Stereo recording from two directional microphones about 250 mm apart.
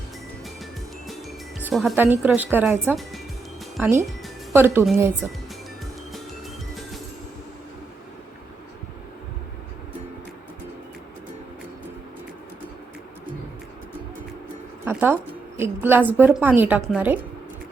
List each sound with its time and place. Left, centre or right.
0.6 s music: centre
1.6 s a woman's voice: centre
14.8 s a woman's voice: centre